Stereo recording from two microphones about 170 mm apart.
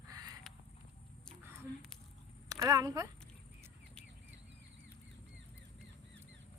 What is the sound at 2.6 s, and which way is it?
Speech, 20° right (ahead or behind).